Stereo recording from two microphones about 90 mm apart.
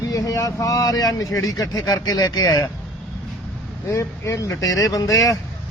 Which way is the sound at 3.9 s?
35° left (ahead or behind).